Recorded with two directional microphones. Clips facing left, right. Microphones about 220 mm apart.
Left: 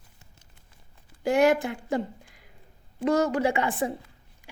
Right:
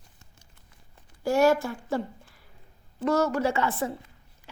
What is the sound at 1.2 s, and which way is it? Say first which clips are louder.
Speech: even; 15° left (ahead or behind).